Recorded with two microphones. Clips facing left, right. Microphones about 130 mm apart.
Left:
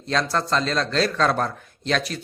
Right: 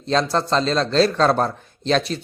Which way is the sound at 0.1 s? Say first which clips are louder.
Right 3 dB; 25° right (ahead or behind).